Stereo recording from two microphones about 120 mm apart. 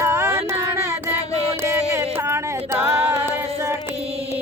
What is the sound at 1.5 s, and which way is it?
Music, 20° right (ahead or behind).